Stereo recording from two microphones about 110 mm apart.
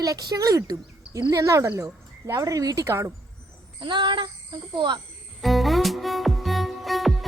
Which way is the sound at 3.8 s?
45° right (ahead or behind).